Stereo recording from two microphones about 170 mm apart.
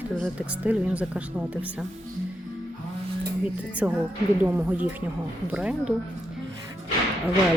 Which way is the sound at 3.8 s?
5° right (ahead or behind).